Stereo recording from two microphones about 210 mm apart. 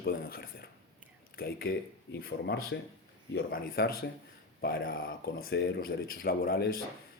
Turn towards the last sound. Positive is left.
turn(degrees=45)  # may be behind; listen again after turning